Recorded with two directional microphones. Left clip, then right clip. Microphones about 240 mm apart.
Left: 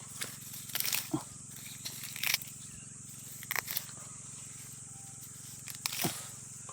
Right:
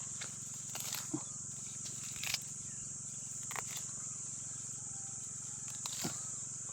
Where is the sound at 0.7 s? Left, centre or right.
Left.